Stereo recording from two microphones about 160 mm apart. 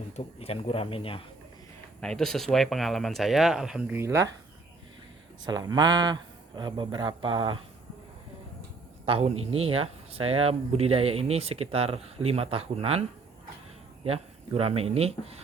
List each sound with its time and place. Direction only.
0.3 s speech: 40° left (ahead or behind)
2.0 s speech: 5° left (ahead or behind); by 4.3 s 15° right (ahead or behind)
5.5 s speech: 25° right (ahead or behind)
9.0 s speech: 35° right (ahead or behind)